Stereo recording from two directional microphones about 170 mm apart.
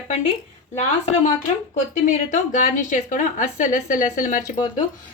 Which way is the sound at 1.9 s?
45° left (ahead or behind).